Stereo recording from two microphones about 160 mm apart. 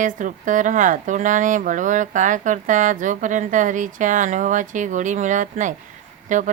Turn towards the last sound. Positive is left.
turn(degrees=-50)  # may be behind; listen again after turning